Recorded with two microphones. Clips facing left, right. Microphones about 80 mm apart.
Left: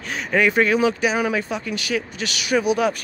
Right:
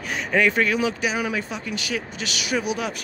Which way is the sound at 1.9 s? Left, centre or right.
Left.